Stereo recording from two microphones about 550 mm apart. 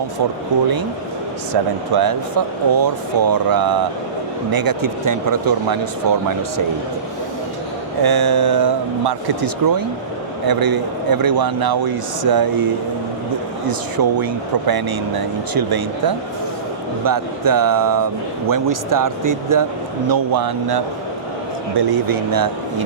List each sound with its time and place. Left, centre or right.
0.5 s a man's voice: right
1.9 s a man's voice: right
8.0 s a man's voice: right